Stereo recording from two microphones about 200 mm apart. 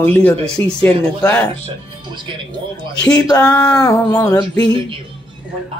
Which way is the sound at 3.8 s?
15° left (ahead or behind).